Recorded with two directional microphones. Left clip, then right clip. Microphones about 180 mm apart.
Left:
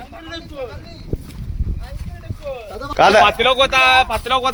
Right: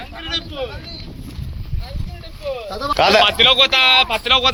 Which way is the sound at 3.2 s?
50° left (ahead or behind).